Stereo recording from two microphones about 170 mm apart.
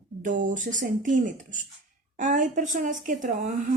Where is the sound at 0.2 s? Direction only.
50° right (ahead or behind).